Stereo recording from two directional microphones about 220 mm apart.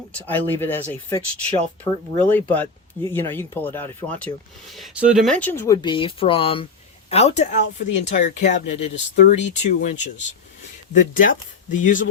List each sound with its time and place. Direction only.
0.1 s speech: 5° left (ahead or behind); by 10.1 s 35° left (ahead or behind)
11.1 s speech: 35° left (ahead or behind)